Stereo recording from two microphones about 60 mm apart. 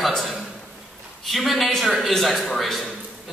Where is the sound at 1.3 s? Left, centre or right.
Centre.